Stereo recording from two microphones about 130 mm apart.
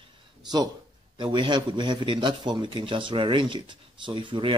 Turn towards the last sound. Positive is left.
turn(degrees=-40)  # may be behind; listen again after turning